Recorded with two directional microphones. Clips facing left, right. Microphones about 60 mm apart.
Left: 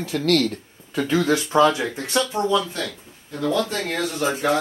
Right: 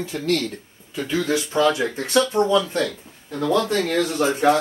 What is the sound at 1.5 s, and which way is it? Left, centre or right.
Speech, left.